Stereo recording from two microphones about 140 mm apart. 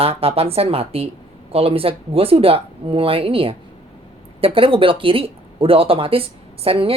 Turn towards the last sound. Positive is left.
turn(degrees=-45)  # may be behind; listen again after turning